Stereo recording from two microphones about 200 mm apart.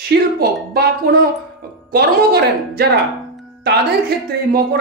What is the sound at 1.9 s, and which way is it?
Speech, 50° right (ahead or behind).